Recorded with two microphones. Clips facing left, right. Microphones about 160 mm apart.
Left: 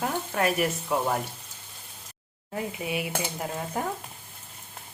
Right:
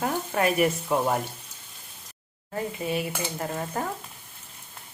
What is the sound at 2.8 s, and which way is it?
Speech, 10° left (ahead or behind).